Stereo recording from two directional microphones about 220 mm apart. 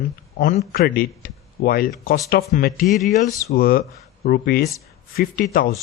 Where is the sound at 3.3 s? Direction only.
15° left (ahead or behind).